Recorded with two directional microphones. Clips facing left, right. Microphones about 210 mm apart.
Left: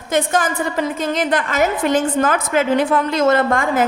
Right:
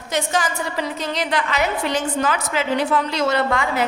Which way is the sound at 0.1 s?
50° left (ahead or behind).